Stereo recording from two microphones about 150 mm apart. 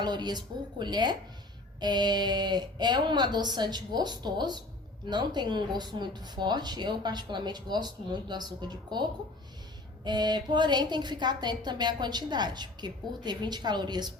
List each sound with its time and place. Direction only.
0.0 s speech: 30° right (ahead or behind)